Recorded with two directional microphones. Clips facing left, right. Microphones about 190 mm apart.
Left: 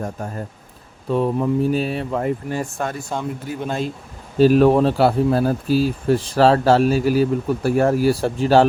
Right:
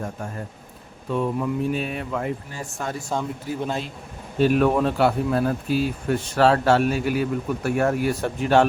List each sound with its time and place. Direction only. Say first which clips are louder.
0.0 s speech: left 4 dB; 40° left (ahead or behind)
2.5 s speech: left 7 dB; 60° left (ahead or behind)
3.1 s speech: left 1 dB; centre (ahead or behind)
4.4 s speech: left 6 dB; 35° left (ahead or behind)